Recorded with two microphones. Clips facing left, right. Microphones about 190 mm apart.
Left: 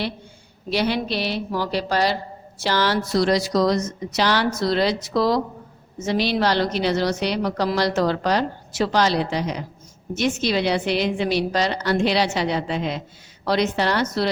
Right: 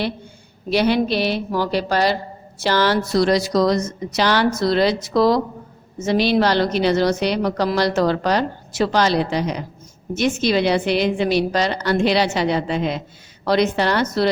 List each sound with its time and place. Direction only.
0.7 s a woman's voice: 55° right (ahead or behind)